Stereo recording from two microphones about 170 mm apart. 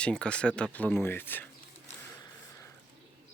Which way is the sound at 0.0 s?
5° left (ahead or behind).